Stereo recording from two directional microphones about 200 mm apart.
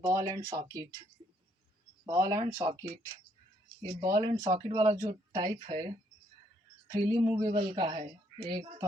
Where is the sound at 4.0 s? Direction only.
20° right (ahead or behind).